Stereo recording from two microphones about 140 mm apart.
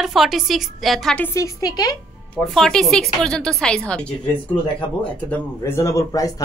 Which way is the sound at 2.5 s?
Centre (ahead or behind).